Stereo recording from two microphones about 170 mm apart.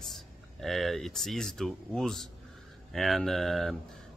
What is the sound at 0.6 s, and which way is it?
Speech, centre (ahead or behind).